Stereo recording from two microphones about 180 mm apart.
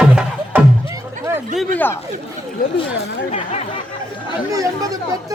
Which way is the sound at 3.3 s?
40° left (ahead or behind).